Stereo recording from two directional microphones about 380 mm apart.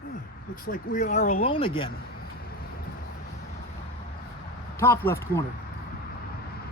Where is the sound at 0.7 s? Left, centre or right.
Left.